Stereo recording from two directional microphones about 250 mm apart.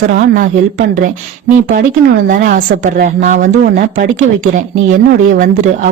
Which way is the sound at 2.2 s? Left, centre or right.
Right.